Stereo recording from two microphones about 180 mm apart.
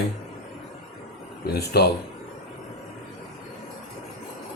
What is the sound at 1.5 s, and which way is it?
Speech, 65° left (ahead or behind).